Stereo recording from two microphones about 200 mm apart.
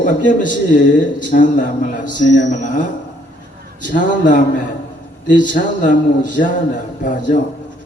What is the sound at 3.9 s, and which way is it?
A man's voice, 40° left (ahead or behind).